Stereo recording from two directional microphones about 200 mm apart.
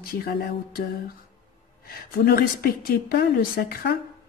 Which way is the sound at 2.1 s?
50° left (ahead or behind).